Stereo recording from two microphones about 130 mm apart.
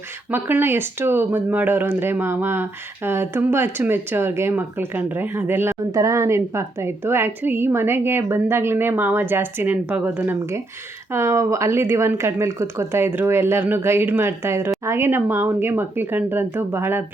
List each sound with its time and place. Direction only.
0.3 s speech: 15° right (ahead or behind)